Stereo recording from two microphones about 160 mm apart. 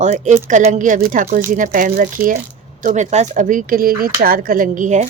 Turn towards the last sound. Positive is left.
turn(degrees=-50)  # may be behind; listen again after turning